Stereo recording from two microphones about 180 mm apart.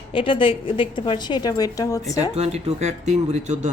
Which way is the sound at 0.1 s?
30° left (ahead or behind).